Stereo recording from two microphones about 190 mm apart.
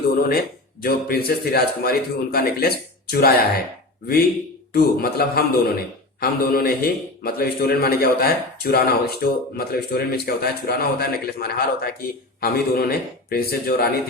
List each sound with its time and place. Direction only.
0.8 s a man's voice: 55° left (ahead or behind)